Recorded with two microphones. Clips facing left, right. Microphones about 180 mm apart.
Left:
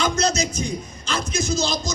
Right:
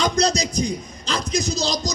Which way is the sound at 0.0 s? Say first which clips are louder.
Right 1 dB; 35° right (ahead or behind).